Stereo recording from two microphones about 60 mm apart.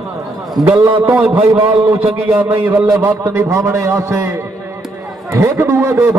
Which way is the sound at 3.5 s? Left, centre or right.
Right.